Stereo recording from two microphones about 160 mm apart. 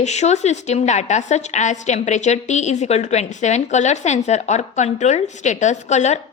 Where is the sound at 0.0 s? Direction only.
45° left (ahead or behind).